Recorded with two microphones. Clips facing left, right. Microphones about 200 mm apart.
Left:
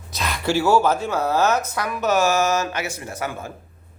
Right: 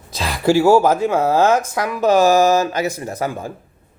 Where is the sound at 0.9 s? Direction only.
90° right.